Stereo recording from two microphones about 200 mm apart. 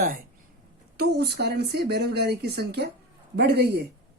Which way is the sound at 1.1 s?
55° right (ahead or behind).